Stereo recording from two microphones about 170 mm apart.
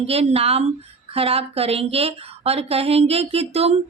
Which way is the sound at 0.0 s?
35° right (ahead or behind).